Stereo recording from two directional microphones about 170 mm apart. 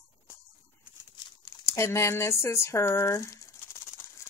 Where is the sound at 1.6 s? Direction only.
15° left (ahead or behind).